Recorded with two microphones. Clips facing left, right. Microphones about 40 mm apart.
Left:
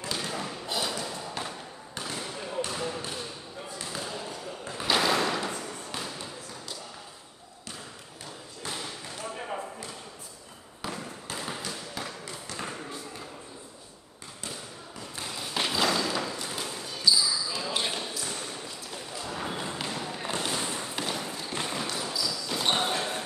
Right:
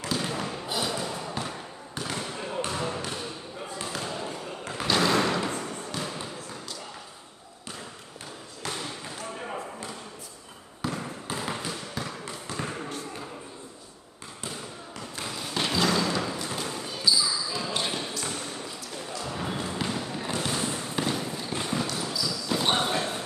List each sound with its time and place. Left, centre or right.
0.1 s a sound: centre
2.4 s bouncing: centre
4.8 s slam: centre
8.8 s basketball bounce: centre
10.8 s trickle: centre
15.3 s a sound: centre
16.6 s basketball bounce: centre
19.2 s a sound: centre
20.3 s fireworks: centre
21.9 s basketball bounce: centre